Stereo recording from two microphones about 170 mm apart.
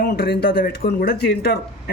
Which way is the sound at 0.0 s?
70° left (ahead or behind).